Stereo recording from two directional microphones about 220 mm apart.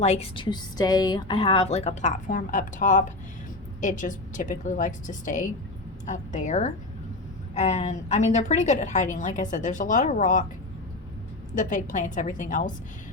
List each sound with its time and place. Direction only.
0.0 s a woman's voice: 30° left (ahead or behind)
11.5 s a woman's voice: 35° left (ahead or behind)